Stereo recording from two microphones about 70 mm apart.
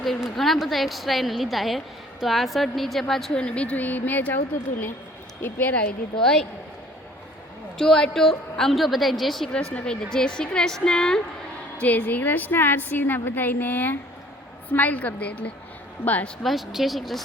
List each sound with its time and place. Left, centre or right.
0.0 s a woman's voice: centre
3.3 s a woman's voice: centre
7.8 s a woman's voice: centre
9.7 s speech: centre
11.8 s a woman's voice: left
16.4 s a woman's voice: centre